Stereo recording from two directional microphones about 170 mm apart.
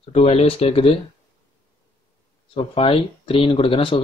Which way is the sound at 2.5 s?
35° left (ahead or behind).